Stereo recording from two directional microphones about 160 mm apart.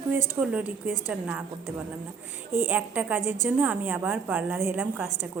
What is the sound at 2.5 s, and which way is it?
A woman's voice, 15° right (ahead or behind).